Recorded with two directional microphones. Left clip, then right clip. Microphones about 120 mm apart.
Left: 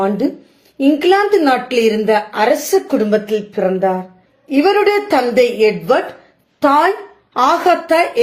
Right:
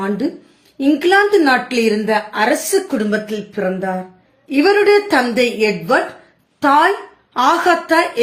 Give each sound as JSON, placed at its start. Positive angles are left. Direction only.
{"t": 0.8, "sound": "a woman's voice", "side_deg": 30}